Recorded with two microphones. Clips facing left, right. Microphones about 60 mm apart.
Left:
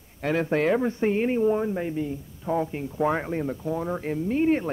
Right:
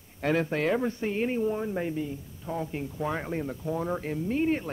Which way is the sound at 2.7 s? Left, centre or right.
Centre.